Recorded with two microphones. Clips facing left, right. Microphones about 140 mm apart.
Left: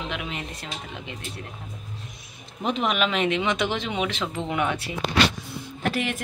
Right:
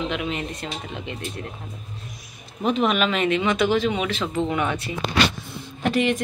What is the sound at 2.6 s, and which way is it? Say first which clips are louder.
A woman's voice: right 3 dB; 15° left (ahead or behind).